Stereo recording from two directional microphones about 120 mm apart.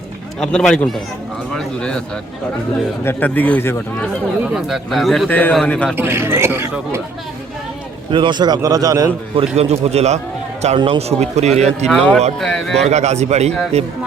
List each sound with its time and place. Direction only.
0.3 s speech: 5° left (ahead or behind)
3.0 s speech: 15° left (ahead or behind)
4.5 s speech: centre (ahead or behind)
5.3 s speech: 15° left (ahead or behind)
6.0 s speech: 20° right (ahead or behind)
8.1 s a man's voice: 40° right (ahead or behind)
9.6 s speech: 60° right (ahead or behind)
11.9 s speech: 5° left (ahead or behind)
12.8 s a man's voice: 70° right (ahead or behind)